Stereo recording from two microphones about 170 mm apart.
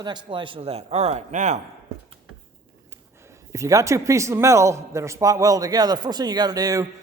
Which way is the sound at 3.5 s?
20° right (ahead or behind).